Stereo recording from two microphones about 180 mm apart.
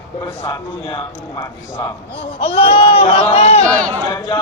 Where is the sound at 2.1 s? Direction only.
30° left (ahead or behind).